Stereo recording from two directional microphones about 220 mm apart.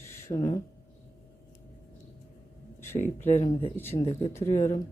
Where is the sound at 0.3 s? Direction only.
15° left (ahead or behind).